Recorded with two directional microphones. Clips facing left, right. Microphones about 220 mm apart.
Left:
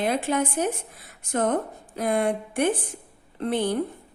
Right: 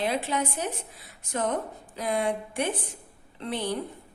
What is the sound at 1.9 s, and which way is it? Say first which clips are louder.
A woman's voice: left 4 dB; 50° left (ahead or behind).